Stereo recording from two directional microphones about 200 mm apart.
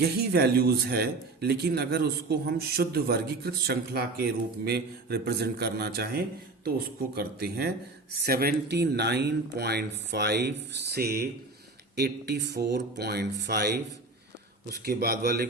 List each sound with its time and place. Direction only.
0.0 s a man's voice: 55° right (ahead or behind)